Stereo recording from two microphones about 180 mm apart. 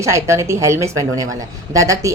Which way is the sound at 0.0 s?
15° right (ahead or behind).